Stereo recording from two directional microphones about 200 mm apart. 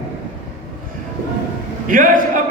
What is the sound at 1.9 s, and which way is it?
Speech, 40° right (ahead or behind).